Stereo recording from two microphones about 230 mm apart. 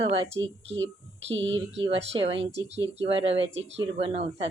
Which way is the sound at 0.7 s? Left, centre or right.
Right.